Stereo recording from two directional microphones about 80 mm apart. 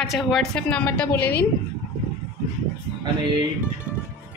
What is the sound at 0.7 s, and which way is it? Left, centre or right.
Speech, centre.